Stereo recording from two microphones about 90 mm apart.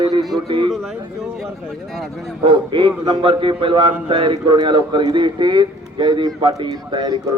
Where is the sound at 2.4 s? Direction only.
65° right (ahead or behind).